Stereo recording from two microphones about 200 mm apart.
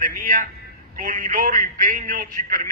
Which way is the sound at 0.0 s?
45° right (ahead or behind).